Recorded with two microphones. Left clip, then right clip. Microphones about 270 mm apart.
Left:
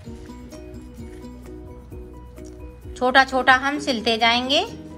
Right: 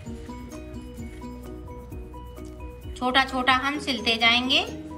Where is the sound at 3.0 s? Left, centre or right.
Left.